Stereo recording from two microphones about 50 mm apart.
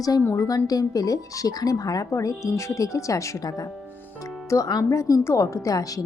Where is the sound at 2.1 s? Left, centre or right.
Left.